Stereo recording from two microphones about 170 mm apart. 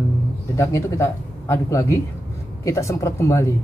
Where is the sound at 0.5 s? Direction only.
20° left (ahead or behind).